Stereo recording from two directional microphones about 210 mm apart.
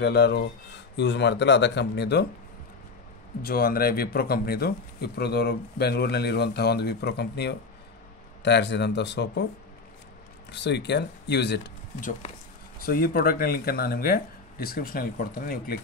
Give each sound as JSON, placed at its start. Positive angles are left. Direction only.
{"t": 0.0, "sound": "speech", "side_deg": 50}
{"t": 3.4, "sound": "speech", "side_deg": 45}
{"t": 10.5, "sound": "speech", "side_deg": 55}
{"t": 12.0, "sound": "speech", "side_deg": 40}